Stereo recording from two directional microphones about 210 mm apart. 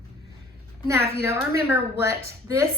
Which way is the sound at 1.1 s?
10° right (ahead or behind).